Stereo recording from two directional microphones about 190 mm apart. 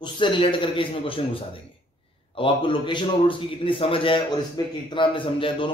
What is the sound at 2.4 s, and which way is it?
A man's voice, 25° left (ahead or behind).